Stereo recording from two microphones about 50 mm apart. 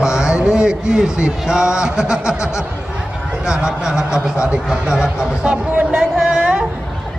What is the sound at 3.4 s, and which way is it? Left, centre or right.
Speech, centre.